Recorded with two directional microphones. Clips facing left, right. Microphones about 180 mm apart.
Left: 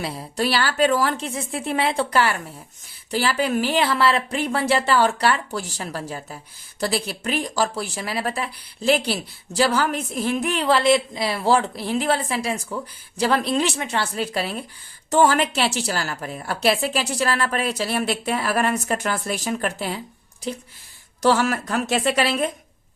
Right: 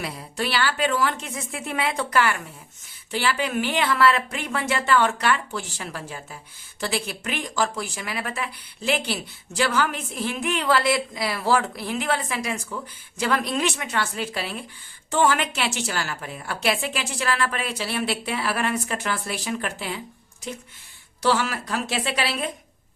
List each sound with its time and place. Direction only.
0.0 s speech: 35° left (ahead or behind)
21.2 s speech: 45° left (ahead or behind)